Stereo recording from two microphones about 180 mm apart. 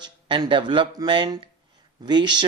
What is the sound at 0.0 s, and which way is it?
Speech, 25° right (ahead or behind).